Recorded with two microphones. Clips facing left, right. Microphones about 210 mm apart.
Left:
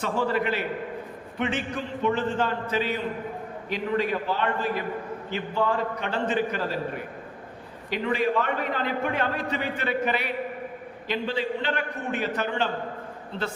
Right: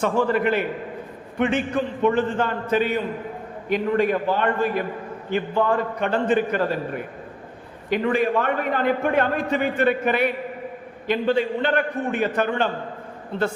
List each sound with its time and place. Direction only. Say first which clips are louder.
0.0 s a man's voice: right 5 dB; 55° right (ahead or behind)
7.9 s a man's voice: right 4 dB; 50° right (ahead or behind)